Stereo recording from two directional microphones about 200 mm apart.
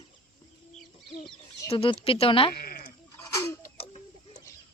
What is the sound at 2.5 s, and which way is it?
Sheep, 45° left (ahead or behind).